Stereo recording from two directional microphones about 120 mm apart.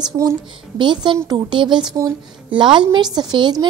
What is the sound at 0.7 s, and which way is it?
A woman's voice, 40° right (ahead or behind).